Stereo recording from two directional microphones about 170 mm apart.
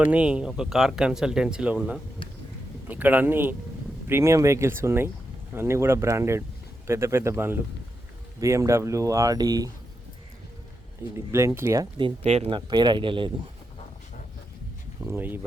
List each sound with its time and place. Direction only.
0.0 s speech: 10° right (ahead or behind)
11.3 s speech: 15° right (ahead or behind)
15.0 s speech: 10° right (ahead or behind)